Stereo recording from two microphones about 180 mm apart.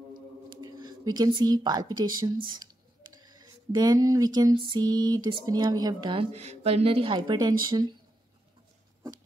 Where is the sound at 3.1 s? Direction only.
20° right (ahead or behind).